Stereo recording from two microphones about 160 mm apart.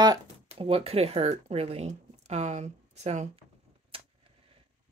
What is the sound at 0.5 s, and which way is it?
Speech, 35° right (ahead or behind).